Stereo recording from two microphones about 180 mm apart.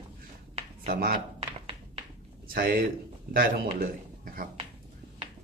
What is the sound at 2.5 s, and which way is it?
Speech, 55° right (ahead or behind).